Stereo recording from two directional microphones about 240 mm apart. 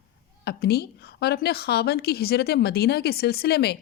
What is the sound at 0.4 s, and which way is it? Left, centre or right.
A woman's voice, left.